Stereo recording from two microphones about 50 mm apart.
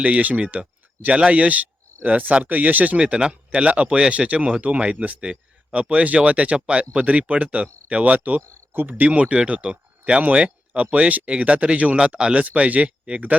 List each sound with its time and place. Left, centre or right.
0.0 s speech: right
3.0 s speech: centre
5.3 s speech: centre
8.4 s speech: right
8.7 s speech: right
9.0 s speech: right